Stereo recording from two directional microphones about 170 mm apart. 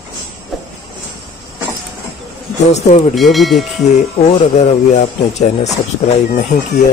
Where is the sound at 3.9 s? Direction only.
40° left (ahead or behind).